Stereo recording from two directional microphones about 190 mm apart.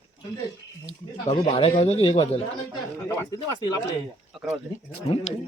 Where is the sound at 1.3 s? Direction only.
30° left (ahead or behind).